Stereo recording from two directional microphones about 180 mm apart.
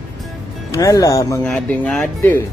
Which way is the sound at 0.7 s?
20° left (ahead or behind).